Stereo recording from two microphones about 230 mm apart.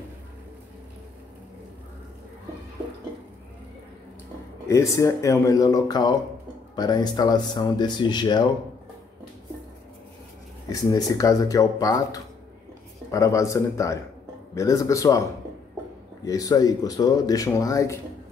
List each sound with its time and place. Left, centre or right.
4.6 s speech: centre
10.7 s speech: centre
16.3 s speech: centre